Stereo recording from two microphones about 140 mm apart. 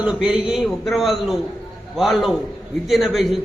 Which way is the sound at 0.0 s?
5° right (ahead or behind).